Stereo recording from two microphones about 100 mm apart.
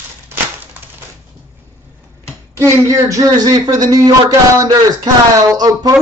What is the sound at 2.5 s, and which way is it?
Speech, 30° right (ahead or behind).